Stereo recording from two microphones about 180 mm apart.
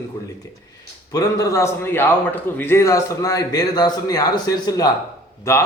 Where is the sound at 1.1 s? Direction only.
20° left (ahead or behind).